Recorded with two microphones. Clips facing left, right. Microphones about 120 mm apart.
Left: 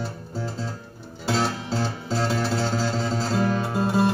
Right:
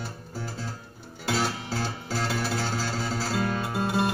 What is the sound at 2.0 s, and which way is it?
Music, 25° left (ahead or behind).